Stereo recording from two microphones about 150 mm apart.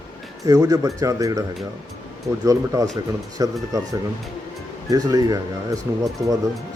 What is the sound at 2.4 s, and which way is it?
Speech, 20° right (ahead or behind).